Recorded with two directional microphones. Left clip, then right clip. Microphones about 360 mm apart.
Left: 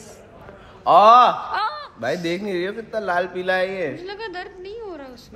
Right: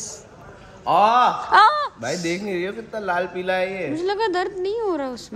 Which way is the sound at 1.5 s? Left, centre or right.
Right.